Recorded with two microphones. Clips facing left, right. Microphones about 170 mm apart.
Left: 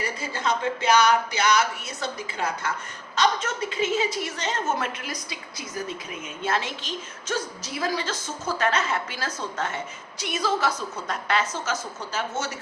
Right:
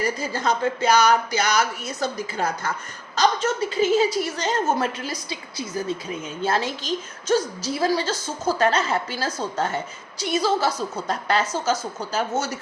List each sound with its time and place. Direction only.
0.0 s a woman's voice: 40° right (ahead or behind)